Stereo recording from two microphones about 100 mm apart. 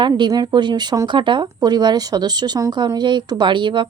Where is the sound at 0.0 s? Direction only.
45° right (ahead or behind).